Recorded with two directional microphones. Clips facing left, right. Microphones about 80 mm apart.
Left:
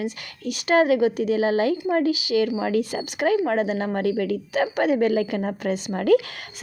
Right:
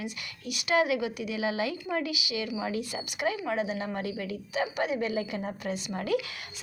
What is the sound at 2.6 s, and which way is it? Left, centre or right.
A woman's voice, left.